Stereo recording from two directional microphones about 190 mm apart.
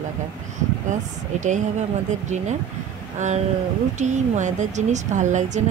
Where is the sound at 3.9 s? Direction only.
40° right (ahead or behind).